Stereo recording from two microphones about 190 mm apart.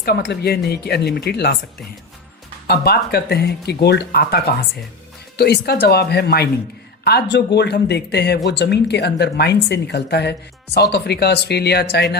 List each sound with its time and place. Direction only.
0.0 s speech: 55° left (ahead or behind)
2.6 s speech: 55° left (ahead or behind)